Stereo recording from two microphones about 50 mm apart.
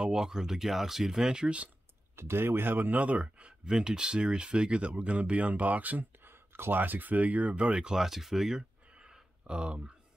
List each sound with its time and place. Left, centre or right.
0.0 s speech: centre
2.1 s speech: right
7.5 s speech: centre
8.8 s a sound: centre